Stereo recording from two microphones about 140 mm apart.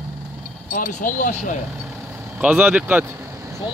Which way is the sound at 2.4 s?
5° right (ahead or behind).